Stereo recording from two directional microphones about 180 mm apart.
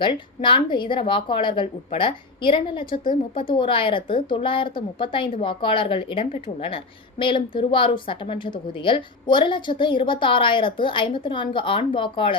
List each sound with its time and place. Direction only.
0.0 s a woman's voice: 25° left (ahead or behind)